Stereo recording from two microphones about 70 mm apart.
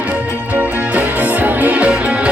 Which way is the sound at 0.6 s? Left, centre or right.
Right.